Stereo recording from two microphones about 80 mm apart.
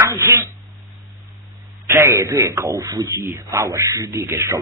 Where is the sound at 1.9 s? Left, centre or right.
Right.